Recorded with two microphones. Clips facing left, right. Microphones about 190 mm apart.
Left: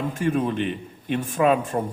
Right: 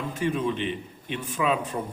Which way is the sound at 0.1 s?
50° left (ahead or behind).